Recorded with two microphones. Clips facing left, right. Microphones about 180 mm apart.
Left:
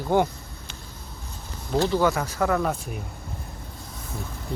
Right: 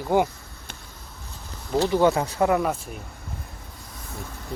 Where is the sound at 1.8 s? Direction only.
15° right (ahead or behind).